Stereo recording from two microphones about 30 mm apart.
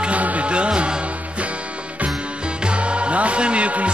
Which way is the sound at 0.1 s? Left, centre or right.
Right.